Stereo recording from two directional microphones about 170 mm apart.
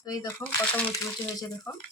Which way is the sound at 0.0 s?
20° left (ahead or behind).